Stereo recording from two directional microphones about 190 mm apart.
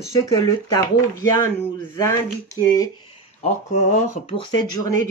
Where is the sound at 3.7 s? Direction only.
40° left (ahead or behind); by 4.9 s 20° left (ahead or behind).